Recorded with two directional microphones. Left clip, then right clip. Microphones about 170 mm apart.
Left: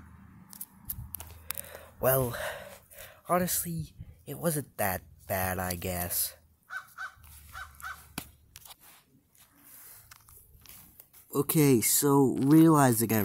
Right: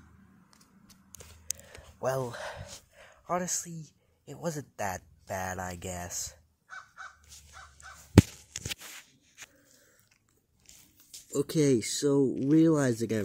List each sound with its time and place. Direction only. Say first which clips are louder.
1.6 s speech: left 6 dB; 15° left (ahead or behind)
11.2 s speech: left 1 dB; 15° left (ahead or behind)